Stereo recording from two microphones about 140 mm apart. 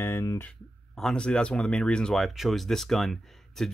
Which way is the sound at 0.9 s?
5° left (ahead or behind).